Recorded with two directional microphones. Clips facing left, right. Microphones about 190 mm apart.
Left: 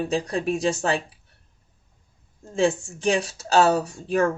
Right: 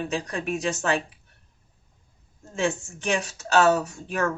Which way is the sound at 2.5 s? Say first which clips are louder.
Left 5 dB; 30° left (ahead or behind).